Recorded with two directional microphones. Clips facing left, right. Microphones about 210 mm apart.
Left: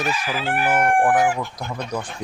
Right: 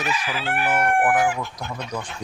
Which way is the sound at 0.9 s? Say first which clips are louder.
Left 2 dB; 30° left (ahead or behind).